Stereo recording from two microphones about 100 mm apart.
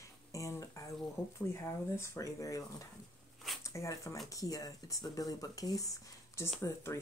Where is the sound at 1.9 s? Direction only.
25° left (ahead or behind).